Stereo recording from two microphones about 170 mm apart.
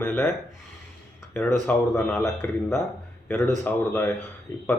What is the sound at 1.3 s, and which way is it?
Speech, 15° left (ahead or behind).